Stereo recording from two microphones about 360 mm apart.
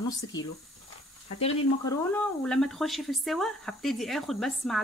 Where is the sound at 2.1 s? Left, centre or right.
Centre.